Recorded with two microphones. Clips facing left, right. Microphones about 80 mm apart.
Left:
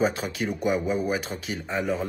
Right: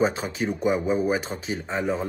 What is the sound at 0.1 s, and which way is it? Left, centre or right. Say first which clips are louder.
Speech: right 1 dB; right.